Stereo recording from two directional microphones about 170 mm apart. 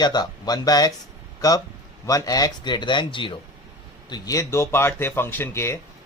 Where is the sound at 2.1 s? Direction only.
20° left (ahead or behind).